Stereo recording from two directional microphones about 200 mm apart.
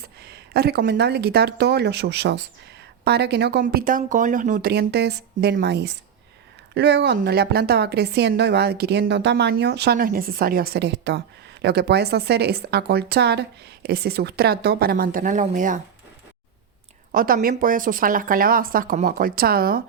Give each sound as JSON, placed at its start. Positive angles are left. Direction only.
{"t": 0.0, "sound": "speech", "side_deg": -55}
{"t": 17.1, "sound": "speech", "side_deg": -45}